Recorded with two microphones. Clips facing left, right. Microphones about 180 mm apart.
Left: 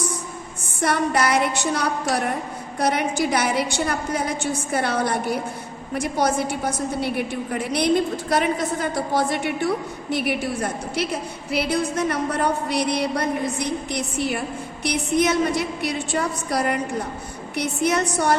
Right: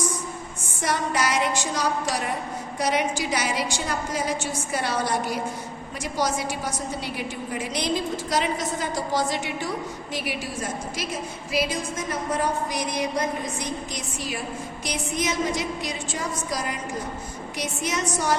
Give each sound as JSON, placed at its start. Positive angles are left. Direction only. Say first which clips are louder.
{"t": 0.8, "sound": "a woman's voice", "louder": "left 4 dB", "side_deg": 60}